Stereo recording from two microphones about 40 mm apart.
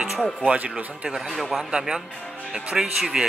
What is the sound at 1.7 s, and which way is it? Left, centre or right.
Speech, centre.